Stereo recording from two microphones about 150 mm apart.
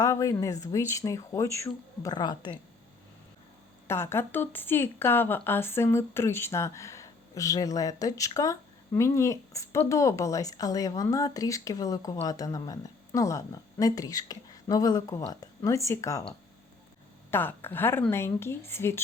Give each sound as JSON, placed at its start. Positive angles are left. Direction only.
{"t": 0.0, "sound": "speech", "side_deg": 20}
{"t": 3.8, "sound": "speech", "side_deg": 15}
{"t": 17.3, "sound": "speech", "side_deg": 15}